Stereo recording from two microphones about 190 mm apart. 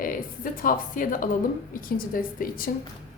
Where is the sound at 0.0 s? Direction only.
45° left (ahead or behind).